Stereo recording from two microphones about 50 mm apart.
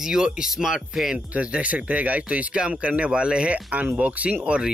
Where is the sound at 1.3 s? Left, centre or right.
Right.